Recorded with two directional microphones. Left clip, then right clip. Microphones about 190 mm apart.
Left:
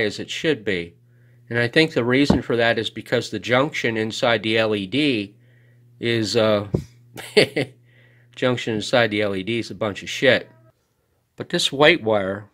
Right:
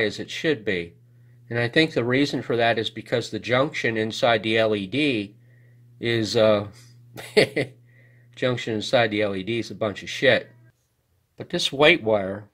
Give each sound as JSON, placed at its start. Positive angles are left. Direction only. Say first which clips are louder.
{"t": 0.0, "sound": "speech", "louder": "left 2 dB", "side_deg": 20}